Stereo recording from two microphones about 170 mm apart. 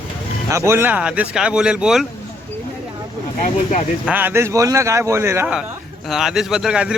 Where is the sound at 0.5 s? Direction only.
15° right (ahead or behind).